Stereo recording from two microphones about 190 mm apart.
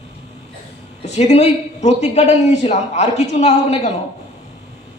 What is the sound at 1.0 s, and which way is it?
A man's voice, 35° left (ahead or behind).